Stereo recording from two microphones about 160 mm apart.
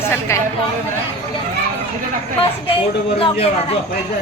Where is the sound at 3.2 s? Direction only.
35° left (ahead or behind).